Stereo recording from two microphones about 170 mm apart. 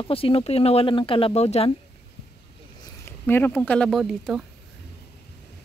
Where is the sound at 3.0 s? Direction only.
15° left (ahead or behind).